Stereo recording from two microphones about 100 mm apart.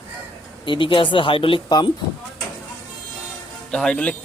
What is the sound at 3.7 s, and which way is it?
Speech, 10° left (ahead or behind).